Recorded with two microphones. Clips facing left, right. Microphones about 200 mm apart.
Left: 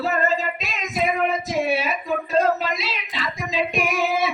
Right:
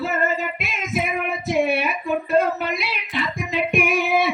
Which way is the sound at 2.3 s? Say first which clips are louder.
Even; 60° right (ahead or behind).